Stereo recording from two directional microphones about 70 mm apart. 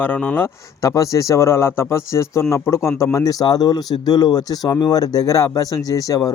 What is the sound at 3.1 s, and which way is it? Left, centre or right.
Speech, left.